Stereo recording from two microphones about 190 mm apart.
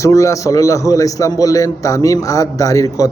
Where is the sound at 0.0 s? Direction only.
15° left (ahead or behind).